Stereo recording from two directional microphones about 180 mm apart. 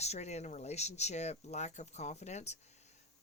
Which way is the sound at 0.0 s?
35° left (ahead or behind).